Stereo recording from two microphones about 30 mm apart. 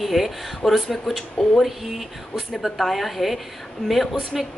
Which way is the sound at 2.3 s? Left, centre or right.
Centre.